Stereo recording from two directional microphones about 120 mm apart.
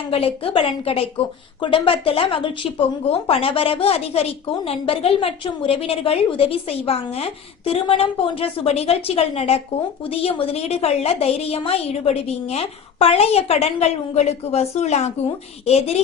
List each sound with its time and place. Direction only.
0.1 s a woman's voice: 55° left (ahead or behind)